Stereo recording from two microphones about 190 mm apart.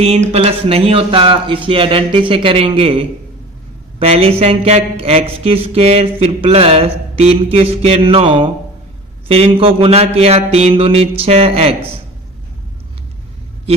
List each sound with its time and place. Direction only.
0.0 s a man's voice: 35° right (ahead or behind)